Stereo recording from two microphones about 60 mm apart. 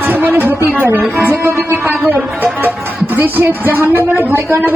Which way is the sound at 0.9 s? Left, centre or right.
Right.